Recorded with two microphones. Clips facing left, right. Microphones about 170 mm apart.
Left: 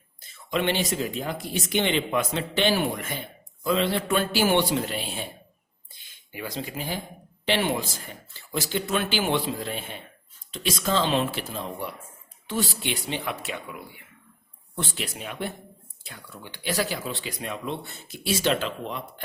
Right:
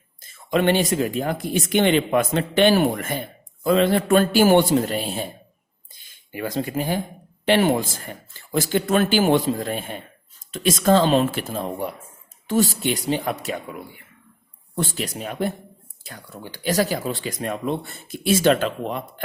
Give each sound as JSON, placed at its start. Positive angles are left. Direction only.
{"t": 0.2, "sound": "speech", "side_deg": -45}
{"t": 14.8, "sound": "speech", "side_deg": -40}